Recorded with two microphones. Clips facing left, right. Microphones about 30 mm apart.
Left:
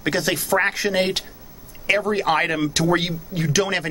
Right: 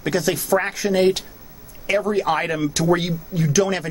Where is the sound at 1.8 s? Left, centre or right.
Left.